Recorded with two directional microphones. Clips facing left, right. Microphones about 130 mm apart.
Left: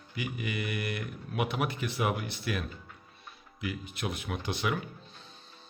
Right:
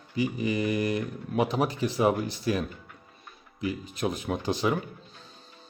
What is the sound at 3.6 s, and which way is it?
Speech, 40° right (ahead or behind).